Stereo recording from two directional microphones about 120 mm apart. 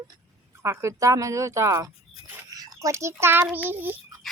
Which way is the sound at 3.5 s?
15° right (ahead or behind).